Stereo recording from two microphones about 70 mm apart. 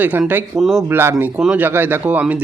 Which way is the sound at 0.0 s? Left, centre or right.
Right.